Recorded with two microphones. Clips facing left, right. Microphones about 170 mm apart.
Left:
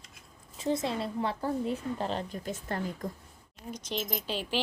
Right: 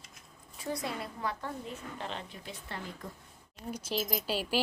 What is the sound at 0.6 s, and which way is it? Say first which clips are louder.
A woman's voice: left 6 dB; 25° left (ahead or behind).